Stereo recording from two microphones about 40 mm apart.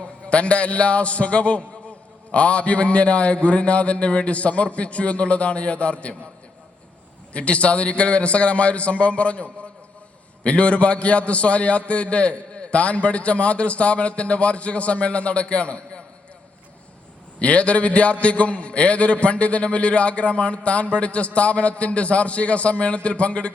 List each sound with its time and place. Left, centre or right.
0.3 s a man's voice: left
7.3 s a man's voice: left
17.4 s a man's voice: left